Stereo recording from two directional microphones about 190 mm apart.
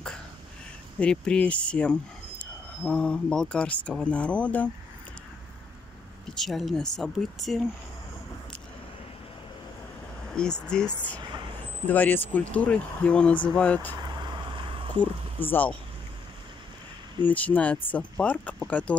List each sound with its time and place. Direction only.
0.9 s speech: 5° left (ahead or behind)
6.3 s speech: centre (ahead or behind)
10.3 s speech: 5° left (ahead or behind)
11.9 s speech: 10° left (ahead or behind)
14.0 s vehicle: 25° right (ahead or behind)
15.4 s speech: 10° left (ahead or behind)
17.2 s speech: 10° left (ahead or behind)